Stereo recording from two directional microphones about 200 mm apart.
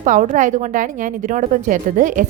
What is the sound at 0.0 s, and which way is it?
A woman's voice, 40° right (ahead or behind).